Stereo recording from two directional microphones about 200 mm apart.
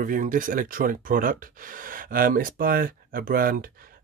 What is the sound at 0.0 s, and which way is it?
Speech, 45° right (ahead or behind).